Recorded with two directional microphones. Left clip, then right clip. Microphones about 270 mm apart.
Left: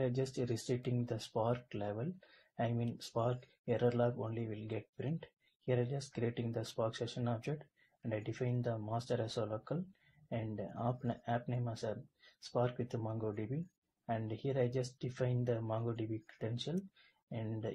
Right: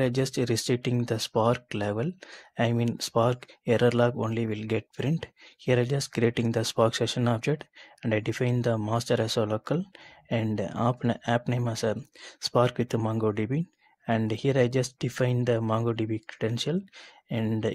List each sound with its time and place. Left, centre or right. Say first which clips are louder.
0.0 s speech: right 11 dB; right